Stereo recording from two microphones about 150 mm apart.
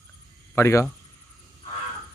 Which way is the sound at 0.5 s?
20° left (ahead or behind).